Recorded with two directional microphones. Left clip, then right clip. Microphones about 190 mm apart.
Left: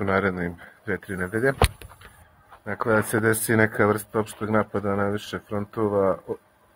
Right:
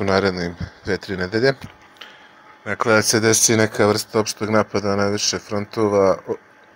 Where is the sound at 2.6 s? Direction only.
15° right (ahead or behind).